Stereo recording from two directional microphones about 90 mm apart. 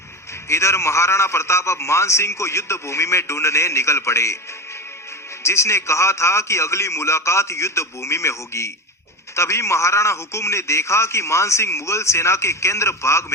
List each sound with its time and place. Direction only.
0.4 s a man's voice: 30° left (ahead or behind)
5.4 s a man's voice: 30° left (ahead or behind)